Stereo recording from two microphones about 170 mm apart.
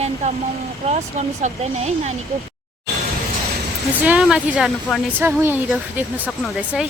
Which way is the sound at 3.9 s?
10° right (ahead or behind).